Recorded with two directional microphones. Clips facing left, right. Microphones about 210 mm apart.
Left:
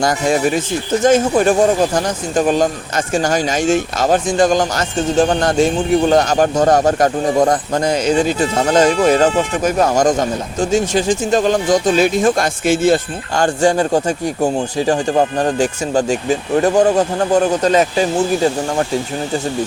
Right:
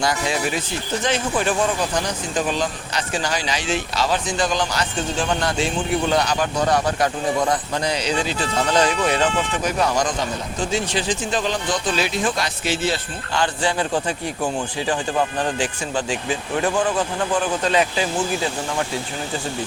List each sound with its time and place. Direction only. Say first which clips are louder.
0.0 s speech: left 7 dB; 45° left (ahead or behind)